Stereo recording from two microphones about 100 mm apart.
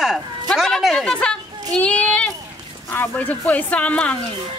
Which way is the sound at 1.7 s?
10° left (ahead or behind).